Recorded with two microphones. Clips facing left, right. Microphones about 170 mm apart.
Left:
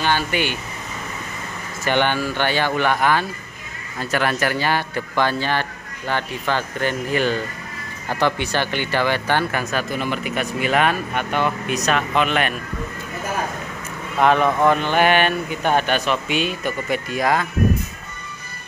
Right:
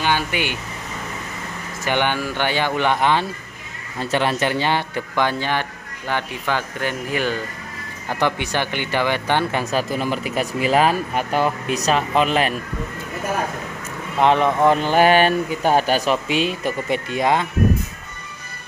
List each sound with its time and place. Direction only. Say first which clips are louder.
0.0 s speech: left 1 dB; 15° right (ahead or behind)
1.9 s speech: left 1 dB; 15° right (ahead or behind); by 12.5 s 35° right (ahead or behind)
14.2 s speech: even; 25° right (ahead or behind)
14.7 s speech: right 2 dB; 35° right (ahead or behind)